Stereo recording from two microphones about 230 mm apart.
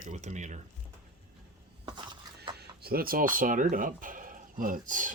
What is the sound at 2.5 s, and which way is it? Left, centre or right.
Speech, right.